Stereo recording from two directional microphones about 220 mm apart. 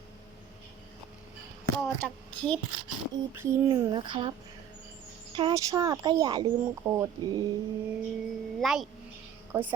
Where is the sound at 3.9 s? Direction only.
20° right (ahead or behind).